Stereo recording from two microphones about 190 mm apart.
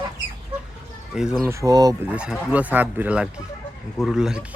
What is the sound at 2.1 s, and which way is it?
Speech, 5° right (ahead or behind).